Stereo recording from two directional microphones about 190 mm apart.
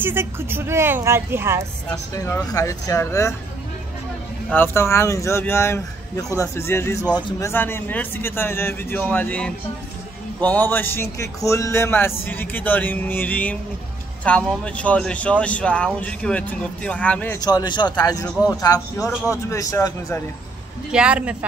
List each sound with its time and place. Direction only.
0.0 s a woman's voice: 10° right (ahead or behind)
2.1 s speech: 15° left (ahead or behind)
4.5 s speech: 10° left (ahead or behind)
17.5 s a man's voice: 20° left (ahead or behind)
20.9 s speech: 5° right (ahead or behind)